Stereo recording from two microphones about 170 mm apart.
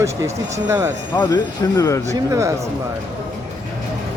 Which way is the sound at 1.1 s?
20° left (ahead or behind).